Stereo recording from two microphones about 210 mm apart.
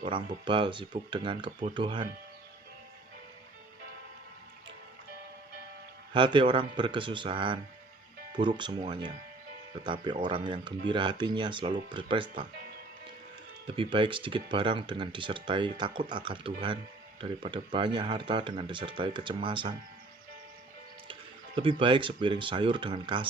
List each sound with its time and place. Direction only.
0.0 s speech: 25° right (ahead or behind)
6.1 s speech: 20° right (ahead or behind)
13.7 s speech: 25° right (ahead or behind)
21.1 s speech: 25° right (ahead or behind)